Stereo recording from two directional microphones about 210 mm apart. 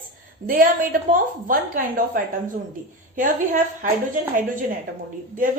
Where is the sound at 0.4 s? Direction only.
40° right (ahead or behind).